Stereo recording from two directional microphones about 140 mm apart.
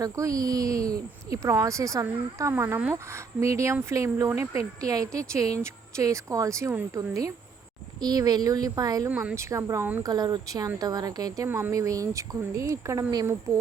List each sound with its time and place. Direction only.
0.0 s speech: 25° right (ahead or behind)
9.0 s speech: 15° right (ahead or behind)
10.0 s speech: 30° right (ahead or behind)